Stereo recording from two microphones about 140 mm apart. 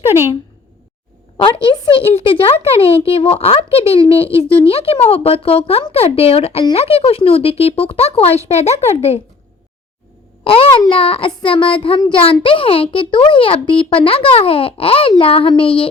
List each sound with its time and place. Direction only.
1.5 s a child's voice: 35° left (ahead or behind)
10.4 s a child's voice: 40° left (ahead or behind)